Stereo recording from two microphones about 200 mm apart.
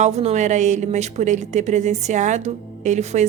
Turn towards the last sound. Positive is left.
turn(degrees=-35)  # may be behind; listen again after turning